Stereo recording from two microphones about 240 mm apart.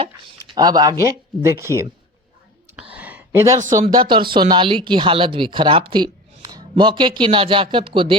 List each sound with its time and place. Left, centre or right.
0.0 s speech: centre
2.9 s a sound: centre
3.9 s speech: centre